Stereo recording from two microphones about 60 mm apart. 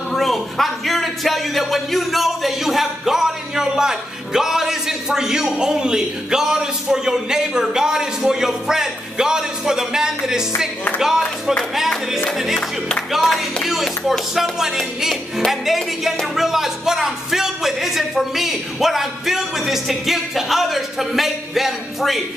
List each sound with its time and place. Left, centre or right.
0.1 s a sound: centre
11.0 s speech: centre
12.5 s music: centre
14.3 s a man's voice: centre